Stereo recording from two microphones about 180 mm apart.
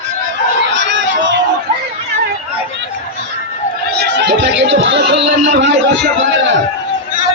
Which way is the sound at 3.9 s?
65° right (ahead or behind).